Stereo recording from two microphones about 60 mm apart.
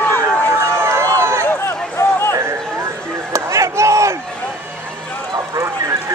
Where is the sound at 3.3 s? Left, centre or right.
Right.